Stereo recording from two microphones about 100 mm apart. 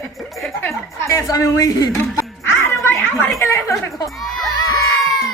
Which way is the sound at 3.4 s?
30° left (ahead or behind).